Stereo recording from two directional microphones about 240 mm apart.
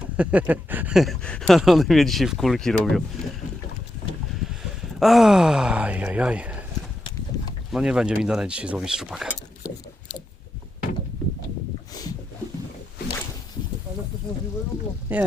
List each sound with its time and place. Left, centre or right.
0.2 s speech: centre
4.9 s speech: centre
7.7 s speech: centre
11.9 s a sound: centre
15.1 s speech: centre